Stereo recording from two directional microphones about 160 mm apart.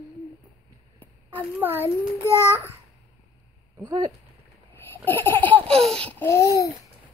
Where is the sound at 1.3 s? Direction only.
10° right (ahead or behind).